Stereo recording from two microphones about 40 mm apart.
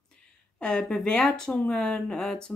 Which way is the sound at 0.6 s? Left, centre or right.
Left.